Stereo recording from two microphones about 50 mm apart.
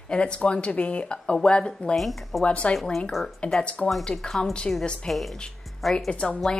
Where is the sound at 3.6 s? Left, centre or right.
Left.